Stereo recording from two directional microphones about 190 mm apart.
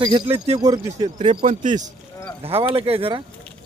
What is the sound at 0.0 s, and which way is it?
Speech, 20° right (ahead or behind).